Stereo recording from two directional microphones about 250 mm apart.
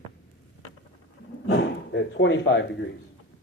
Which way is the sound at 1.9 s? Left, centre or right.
Left.